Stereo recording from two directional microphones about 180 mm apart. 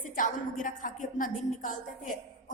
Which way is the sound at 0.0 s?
45° left (ahead or behind).